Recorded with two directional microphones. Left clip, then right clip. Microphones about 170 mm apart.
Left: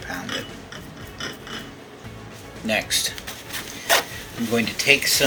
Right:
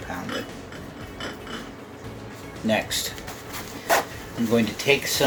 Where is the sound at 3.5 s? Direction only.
5° right (ahead or behind).